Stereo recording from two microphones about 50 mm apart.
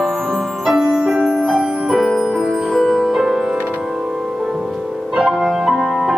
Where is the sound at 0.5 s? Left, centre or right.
Centre.